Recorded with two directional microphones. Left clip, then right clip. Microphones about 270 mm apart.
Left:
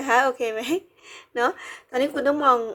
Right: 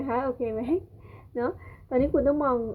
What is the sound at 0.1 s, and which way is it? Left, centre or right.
Speech, centre.